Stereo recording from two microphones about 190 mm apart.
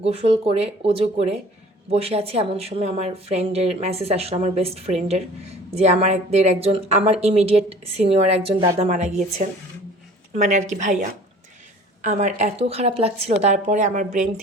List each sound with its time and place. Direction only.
0.0 s speech: 35° right (ahead or behind)
10.3 s speech: 40° right (ahead or behind)
12.0 s speech: 35° right (ahead or behind)